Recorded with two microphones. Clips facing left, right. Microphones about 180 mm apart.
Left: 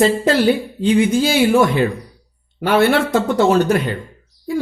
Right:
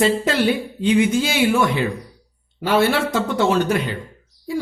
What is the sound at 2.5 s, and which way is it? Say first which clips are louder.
Speech: left 3 dB; 60° left (ahead or behind).